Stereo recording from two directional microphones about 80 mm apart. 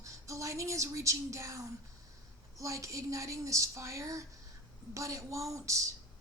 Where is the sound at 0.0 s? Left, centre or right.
Right.